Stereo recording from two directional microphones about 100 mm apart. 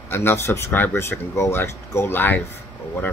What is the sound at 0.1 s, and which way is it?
Speech, 25° left (ahead or behind).